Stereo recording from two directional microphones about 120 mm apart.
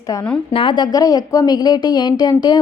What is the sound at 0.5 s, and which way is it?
A woman's voice, 45° left (ahead or behind).